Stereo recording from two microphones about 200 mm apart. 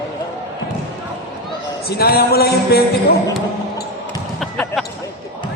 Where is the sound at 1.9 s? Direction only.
50° left (ahead or behind).